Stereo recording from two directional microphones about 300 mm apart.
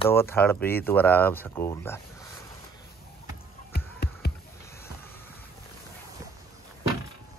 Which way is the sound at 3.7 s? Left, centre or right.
Left.